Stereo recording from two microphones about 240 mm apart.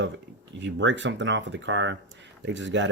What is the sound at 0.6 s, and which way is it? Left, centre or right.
Speech, right.